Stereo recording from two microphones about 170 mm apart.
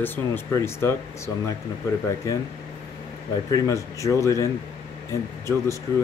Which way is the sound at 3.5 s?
20° left (ahead or behind).